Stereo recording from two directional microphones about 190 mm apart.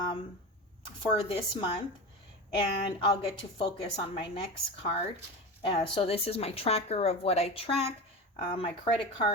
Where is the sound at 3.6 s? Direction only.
25° left (ahead or behind).